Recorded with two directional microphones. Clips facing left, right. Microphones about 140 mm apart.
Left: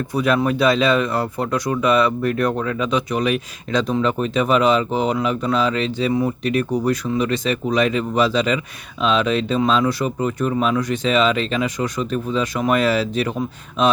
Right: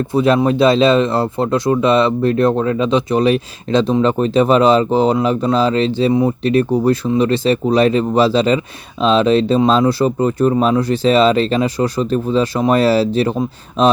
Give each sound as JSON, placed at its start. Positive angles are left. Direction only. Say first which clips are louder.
{"t": 0.1, "sound": "speech", "louder": "right 5 dB", "side_deg": -25}